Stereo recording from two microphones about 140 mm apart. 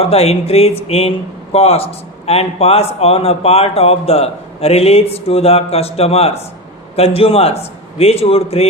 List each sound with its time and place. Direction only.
0.0 s a man's voice: 45° left (ahead or behind)